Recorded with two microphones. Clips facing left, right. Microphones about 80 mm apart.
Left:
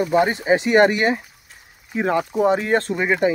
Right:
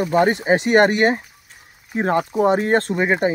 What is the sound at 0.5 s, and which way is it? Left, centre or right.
Speech, right.